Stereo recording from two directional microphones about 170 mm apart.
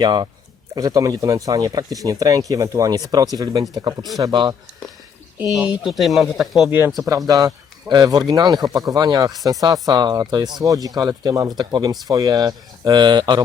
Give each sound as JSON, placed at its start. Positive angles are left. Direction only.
{"t": 0.0, "sound": "a man's voice", "side_deg": -25}
{"t": 5.5, "sound": "speech", "side_deg": -5}
{"t": 6.7, "sound": "a man's voice", "side_deg": -10}